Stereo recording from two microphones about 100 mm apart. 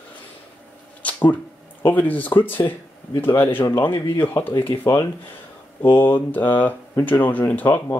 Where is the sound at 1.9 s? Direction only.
15° left (ahead or behind).